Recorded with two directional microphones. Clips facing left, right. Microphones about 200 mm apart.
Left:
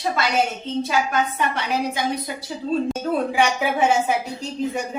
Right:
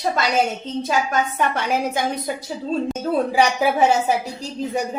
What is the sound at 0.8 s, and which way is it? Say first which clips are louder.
A woman's voice: right 1 dB; 45° right (ahead or behind).